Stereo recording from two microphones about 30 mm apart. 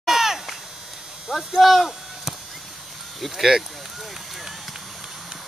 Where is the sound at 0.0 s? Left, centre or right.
Centre.